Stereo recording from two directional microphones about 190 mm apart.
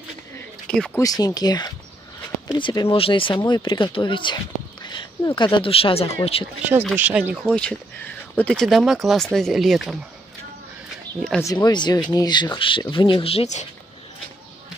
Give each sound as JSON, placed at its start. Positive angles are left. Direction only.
{"t": 0.7, "sound": "speech", "side_deg": 5}
{"t": 1.0, "sound": "speech", "side_deg": 20}
{"t": 7.0, "sound": "speech", "side_deg": -10}
{"t": 7.4, "sound": "speech", "side_deg": 5}
{"t": 11.4, "sound": "speech", "side_deg": 20}